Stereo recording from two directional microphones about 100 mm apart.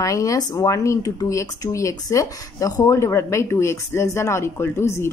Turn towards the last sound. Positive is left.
turn(degrees=25)  # may be behind; listen again after turning